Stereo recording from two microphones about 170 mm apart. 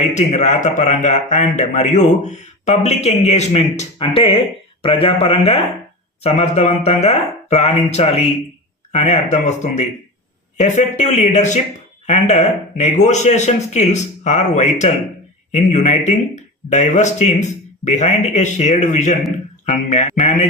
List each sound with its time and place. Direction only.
0.0 s a man's voice: 45° left (ahead or behind)